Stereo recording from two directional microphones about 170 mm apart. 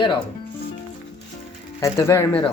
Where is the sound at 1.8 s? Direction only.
15° left (ahead or behind).